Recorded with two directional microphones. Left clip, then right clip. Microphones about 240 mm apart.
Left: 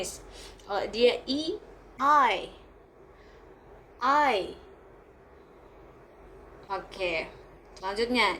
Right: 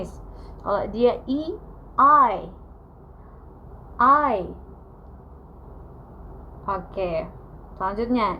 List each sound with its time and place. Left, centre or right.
0.7 s a woman's voice: left
4.0 s speech: left
6.7 s speech: left